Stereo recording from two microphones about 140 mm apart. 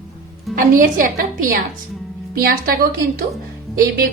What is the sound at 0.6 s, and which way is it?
A woman's voice, 75° right (ahead or behind).